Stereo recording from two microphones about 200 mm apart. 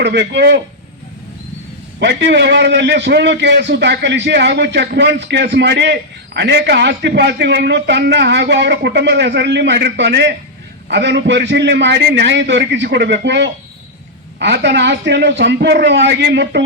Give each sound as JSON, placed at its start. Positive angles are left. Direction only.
{"t": 0.0, "sound": "a man's voice", "side_deg": -60}
{"t": 2.0, "sound": "a man's voice", "side_deg": -60}